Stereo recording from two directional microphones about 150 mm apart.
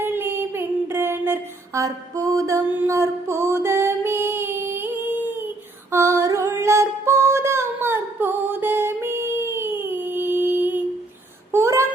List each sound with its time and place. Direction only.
0.0 s child singing: 15° right (ahead or behind)
5.9 s a sound: 15° right (ahead or behind)
11.5 s child singing: 20° right (ahead or behind)